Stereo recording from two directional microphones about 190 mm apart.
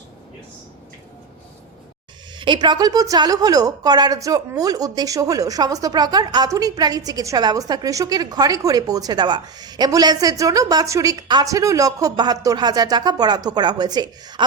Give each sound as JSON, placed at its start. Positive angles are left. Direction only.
{"t": 2.4, "sound": "a woman's voice", "side_deg": -25}